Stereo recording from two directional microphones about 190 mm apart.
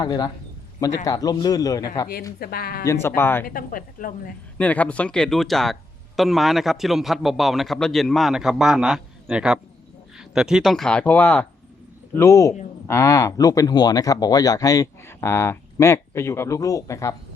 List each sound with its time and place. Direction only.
0.0 s a man's voice: 20° left (ahead or behind)
2.4 s speech: 55° left (ahead or behind)
2.8 s speech: 15° left (ahead or behind)
3.4 s speech: 50° left (ahead or behind)
4.5 s a man's voice: 5° left (ahead or behind)